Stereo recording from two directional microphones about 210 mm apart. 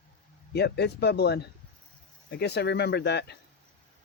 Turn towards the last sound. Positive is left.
turn(degrees=50)  # may be behind; listen again after turning